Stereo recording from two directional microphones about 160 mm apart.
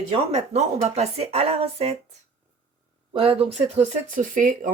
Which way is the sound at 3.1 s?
35° right (ahead or behind).